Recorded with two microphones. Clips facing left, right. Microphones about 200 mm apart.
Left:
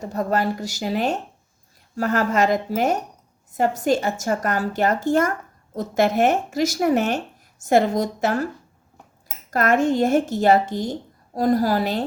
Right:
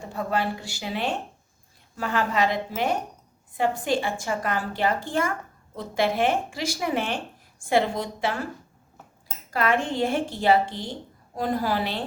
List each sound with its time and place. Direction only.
0.0 s a woman's voice: 40° left (ahead or behind)
9.5 s a woman's voice: 45° left (ahead or behind)